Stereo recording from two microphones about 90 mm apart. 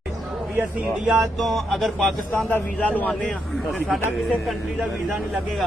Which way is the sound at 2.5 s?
15° left (ahead or behind).